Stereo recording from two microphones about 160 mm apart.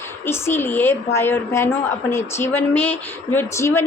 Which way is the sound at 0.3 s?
15° left (ahead or behind).